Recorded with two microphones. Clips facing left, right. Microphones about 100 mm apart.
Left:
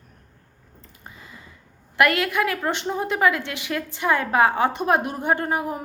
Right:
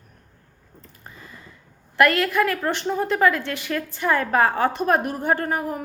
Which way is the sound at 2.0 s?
15° left (ahead or behind).